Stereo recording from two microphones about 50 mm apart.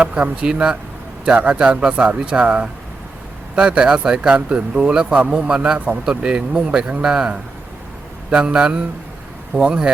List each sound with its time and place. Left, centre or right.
0.0 s a man's voice: right